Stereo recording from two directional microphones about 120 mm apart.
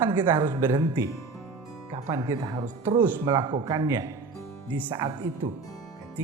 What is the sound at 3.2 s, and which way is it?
Speech, 40° right (ahead or behind).